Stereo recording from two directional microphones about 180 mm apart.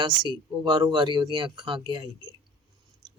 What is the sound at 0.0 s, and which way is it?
Speech, 25° right (ahead or behind).